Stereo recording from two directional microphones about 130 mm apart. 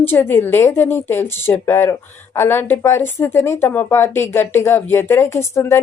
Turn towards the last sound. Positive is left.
turn(degrees=20)  # may be behind; listen again after turning